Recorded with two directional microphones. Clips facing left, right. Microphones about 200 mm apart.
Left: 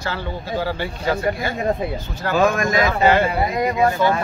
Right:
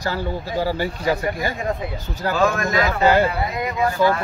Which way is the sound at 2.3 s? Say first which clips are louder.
Left 2 dB; 15° left (ahead or behind).